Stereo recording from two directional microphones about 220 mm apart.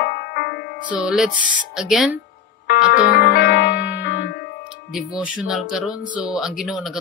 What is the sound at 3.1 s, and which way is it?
Music, 45° left (ahead or behind).